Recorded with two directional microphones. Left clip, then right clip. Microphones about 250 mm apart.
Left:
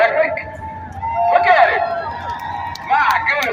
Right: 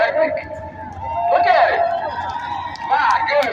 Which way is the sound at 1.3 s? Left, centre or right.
Centre.